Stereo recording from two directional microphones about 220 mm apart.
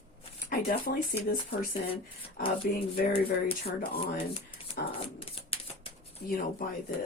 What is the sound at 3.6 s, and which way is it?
Speech, 45° left (ahead or behind).